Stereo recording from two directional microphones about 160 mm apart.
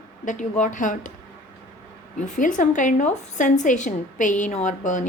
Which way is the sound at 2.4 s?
55° left (ahead or behind).